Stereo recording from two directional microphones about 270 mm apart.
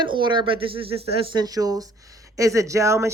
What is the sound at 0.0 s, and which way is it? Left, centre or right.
Speech, centre.